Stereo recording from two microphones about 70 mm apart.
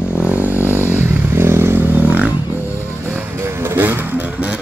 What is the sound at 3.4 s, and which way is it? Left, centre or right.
Vehicle, right.